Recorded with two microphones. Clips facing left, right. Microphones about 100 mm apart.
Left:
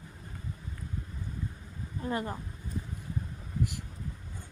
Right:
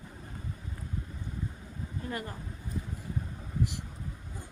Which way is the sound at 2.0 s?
25° left (ahead or behind).